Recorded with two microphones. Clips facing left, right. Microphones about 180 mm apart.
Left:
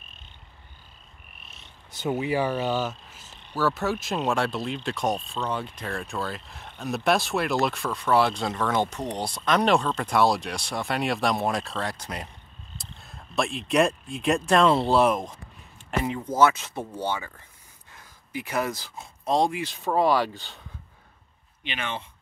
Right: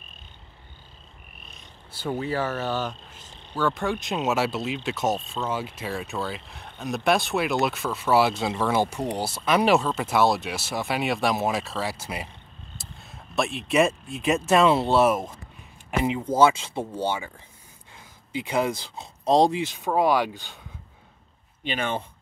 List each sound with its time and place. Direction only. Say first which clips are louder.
2.1 s speech: left 2 dB; 15° left (ahead or behind); by 15.3 s 5° right (ahead or behind)
16.3 s speech: right 2 dB; 30° right (ahead or behind)
18.3 s speech: right 3 dB; 20° right (ahead or behind)
18.9 s speech: right 4 dB; 35° right (ahead or behind)
19.8 s speech: even; centre (ahead or behind)
20.1 s speech: even; 15° right (ahead or behind)
21.6 s speech: right 5 dB; 45° right (ahead or behind)